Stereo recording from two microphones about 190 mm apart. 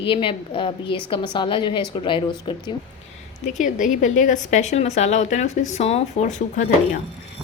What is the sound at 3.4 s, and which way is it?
Speech, 40° left (ahead or behind).